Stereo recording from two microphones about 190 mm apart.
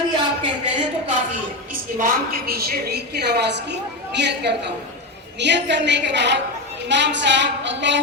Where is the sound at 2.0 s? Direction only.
50° right (ahead or behind).